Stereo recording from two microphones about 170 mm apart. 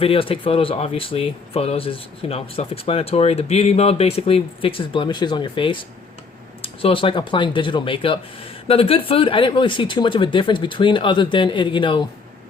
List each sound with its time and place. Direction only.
0.0 s speech: 35° left (ahead or behind)